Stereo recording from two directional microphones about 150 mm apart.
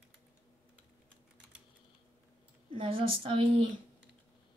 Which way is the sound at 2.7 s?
35° right (ahead or behind).